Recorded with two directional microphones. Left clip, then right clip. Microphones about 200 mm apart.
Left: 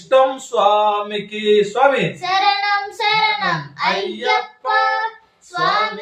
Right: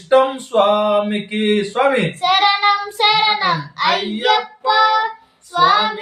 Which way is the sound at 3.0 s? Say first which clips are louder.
Right 2 dB; 20° right (ahead or behind).